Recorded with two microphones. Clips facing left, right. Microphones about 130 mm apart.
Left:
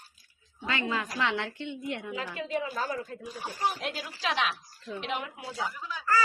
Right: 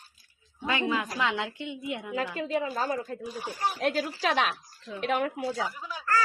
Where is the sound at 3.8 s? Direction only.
45° right (ahead or behind).